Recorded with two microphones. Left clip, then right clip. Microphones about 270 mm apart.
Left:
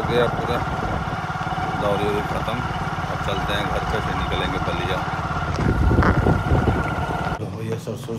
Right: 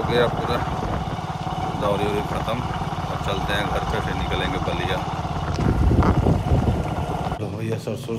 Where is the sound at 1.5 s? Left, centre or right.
Centre.